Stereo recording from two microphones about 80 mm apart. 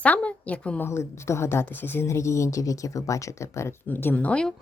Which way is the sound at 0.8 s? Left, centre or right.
Left.